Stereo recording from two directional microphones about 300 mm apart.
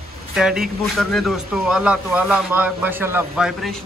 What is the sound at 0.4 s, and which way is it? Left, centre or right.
Speech, centre.